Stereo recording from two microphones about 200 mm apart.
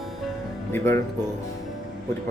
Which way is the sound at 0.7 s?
10° left (ahead or behind).